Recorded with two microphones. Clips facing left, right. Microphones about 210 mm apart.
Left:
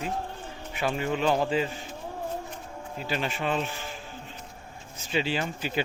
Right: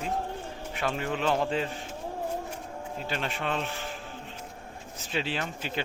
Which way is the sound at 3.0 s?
5° left (ahead or behind).